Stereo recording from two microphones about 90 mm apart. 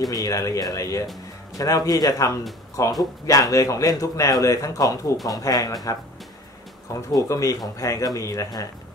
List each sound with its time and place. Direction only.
0.1 s a man's voice: 40° left (ahead or behind)
6.9 s a man's voice: 40° left (ahead or behind)